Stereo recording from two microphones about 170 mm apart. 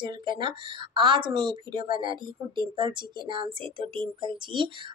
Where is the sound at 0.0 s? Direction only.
30° right (ahead or behind).